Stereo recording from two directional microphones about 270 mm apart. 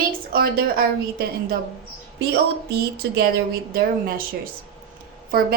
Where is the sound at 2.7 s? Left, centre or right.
Right.